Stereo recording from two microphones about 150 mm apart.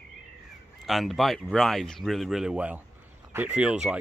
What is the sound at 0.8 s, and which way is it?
Speech, centre (ahead or behind).